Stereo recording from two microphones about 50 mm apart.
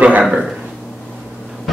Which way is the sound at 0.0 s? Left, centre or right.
Right.